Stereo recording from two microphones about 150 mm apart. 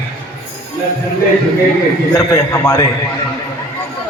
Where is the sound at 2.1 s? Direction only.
20° left (ahead or behind).